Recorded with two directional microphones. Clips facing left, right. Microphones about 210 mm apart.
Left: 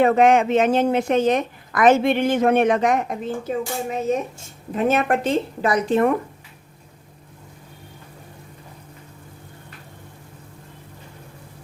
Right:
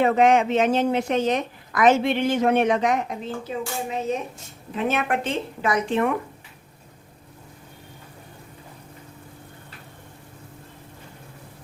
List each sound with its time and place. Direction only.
0.0 s a woman's voice: 50° left (ahead or behind)